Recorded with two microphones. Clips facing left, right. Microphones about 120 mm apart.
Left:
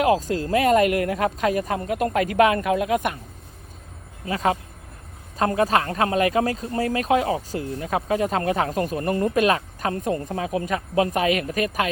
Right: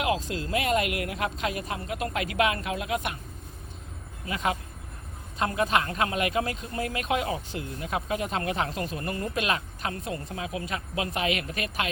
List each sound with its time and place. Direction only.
0.3 s a woman's voice: 40° left (ahead or behind)
4.3 s speech: 35° left (ahead or behind)